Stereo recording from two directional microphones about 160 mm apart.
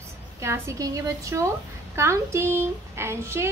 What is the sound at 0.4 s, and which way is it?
A woman's voice, 20° right (ahead or behind).